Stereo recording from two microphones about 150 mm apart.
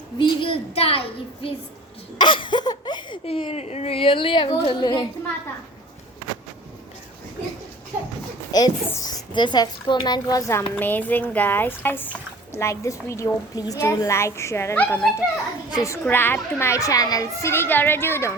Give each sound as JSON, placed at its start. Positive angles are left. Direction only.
{"t": 0.2, "sound": "speech", "side_deg": 35}
{"t": 8.5, "sound": "a woman's voice", "side_deg": 25}
{"t": 10.8, "sound": "speech", "side_deg": 10}